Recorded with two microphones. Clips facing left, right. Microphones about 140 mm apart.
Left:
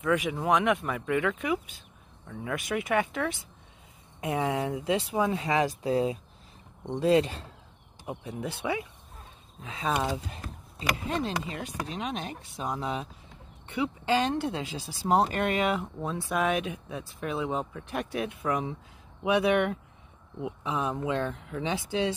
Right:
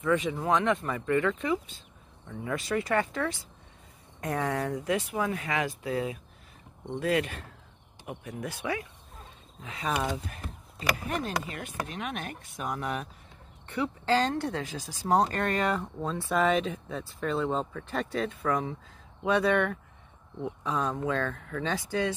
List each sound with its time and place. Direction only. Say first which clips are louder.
0.0 s speech: even; 10° left (ahead or behind)
3.1 s speech: even; 15° left (ahead or behind)
12.6 s speech: left 1 dB; 15° left (ahead or behind)
16.3 s speech: right 2 dB; 5° left (ahead or behind); by 22.1 s 20° left (ahead or behind)